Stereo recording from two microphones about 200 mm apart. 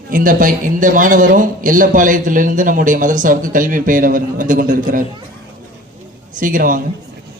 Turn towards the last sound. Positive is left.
turn(degrees=-40)  # may be behind; listen again after turning